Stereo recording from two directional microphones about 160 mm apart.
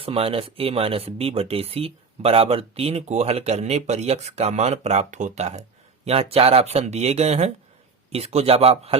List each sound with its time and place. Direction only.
0.0 s speech: 35° right (ahead or behind)